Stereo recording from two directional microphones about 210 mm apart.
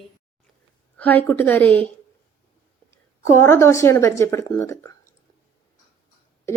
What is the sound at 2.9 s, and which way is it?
A woman's voice, 15° left (ahead or behind).